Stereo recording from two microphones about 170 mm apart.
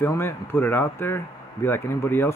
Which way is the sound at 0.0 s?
15° left (ahead or behind).